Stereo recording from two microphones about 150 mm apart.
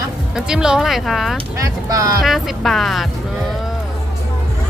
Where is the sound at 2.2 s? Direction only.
Centre (ahead or behind).